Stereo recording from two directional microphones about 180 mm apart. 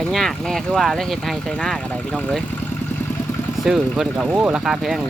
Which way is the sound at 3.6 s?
Centre (ahead or behind).